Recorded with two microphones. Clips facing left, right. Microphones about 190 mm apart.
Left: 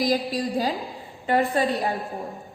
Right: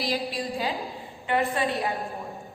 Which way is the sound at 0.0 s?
45° left (ahead or behind).